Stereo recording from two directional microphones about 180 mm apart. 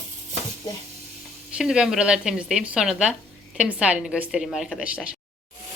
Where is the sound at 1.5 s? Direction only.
5° right (ahead or behind).